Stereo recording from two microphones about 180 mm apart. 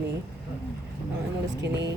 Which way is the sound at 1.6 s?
70° right (ahead or behind).